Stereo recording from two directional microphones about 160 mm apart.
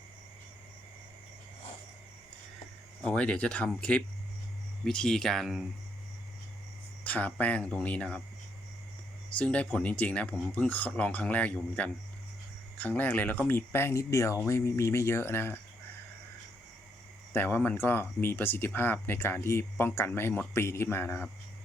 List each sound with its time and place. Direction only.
3.0 s speech: 10° left (ahead or behind)
7.0 s speech: 10° left (ahead or behind)
9.4 s speech: 10° left (ahead or behind)
17.3 s speech: 10° left (ahead or behind)